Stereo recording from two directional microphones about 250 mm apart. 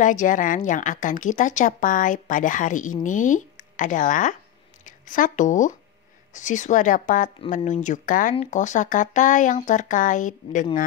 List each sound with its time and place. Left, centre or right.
0.0 s a woman's voice: left